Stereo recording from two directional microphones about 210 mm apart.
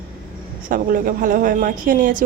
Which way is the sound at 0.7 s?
40° right (ahead or behind).